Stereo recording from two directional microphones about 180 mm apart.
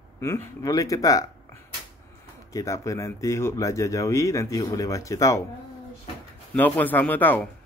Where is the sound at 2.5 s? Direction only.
20° left (ahead or behind).